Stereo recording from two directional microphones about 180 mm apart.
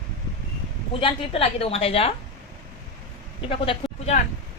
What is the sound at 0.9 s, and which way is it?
A woman's voice, 30° left (ahead or behind).